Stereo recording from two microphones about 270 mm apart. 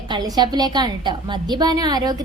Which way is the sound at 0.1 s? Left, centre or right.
Centre.